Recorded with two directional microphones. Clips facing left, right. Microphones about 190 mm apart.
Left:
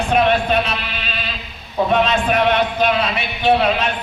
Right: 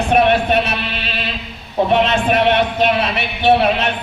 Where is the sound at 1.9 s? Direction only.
25° right (ahead or behind).